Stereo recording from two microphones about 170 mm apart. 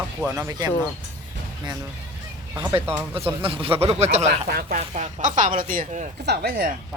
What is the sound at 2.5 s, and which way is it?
Speech, 15° right (ahead or behind).